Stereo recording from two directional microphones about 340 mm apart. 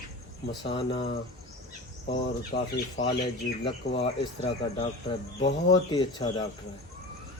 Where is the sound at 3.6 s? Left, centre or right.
Centre.